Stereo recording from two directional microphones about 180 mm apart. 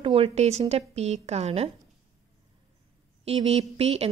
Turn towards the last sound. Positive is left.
turn(degrees=-35)  # may be behind; listen again after turning